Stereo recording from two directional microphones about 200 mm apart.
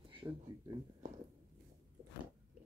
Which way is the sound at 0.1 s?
25° right (ahead or behind).